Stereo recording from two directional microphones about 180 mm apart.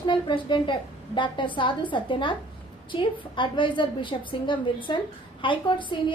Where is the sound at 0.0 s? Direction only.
25° left (ahead or behind).